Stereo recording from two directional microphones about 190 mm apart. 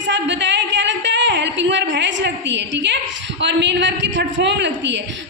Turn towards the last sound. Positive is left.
turn(degrees=-70)  # may be behind; listen again after turning